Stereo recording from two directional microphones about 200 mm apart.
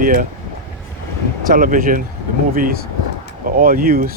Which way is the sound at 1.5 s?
45° right (ahead or behind).